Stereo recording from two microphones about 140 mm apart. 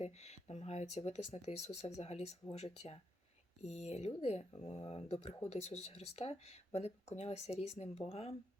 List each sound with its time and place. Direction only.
0.0 s speech: 50° left (ahead or behind)